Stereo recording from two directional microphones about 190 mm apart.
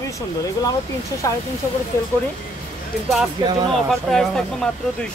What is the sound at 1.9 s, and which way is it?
Speech, 15° left (ahead or behind).